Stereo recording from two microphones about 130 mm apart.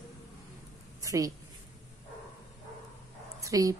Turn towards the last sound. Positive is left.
turn(degrees=-25)  # may be behind; listen again after turning